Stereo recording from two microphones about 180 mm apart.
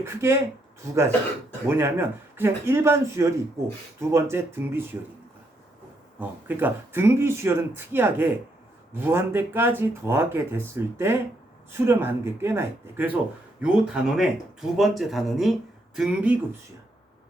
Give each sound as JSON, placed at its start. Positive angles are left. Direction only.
{"t": 0.0, "sound": "speech", "side_deg": -15}
{"t": 6.1, "sound": "speech", "side_deg": -10}